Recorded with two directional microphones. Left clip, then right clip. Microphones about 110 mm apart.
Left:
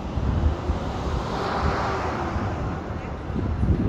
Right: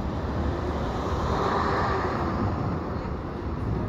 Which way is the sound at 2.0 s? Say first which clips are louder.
Even; 25° left (ahead or behind).